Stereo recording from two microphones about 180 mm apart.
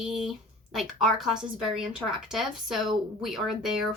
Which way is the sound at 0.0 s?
Centre (ahead or behind).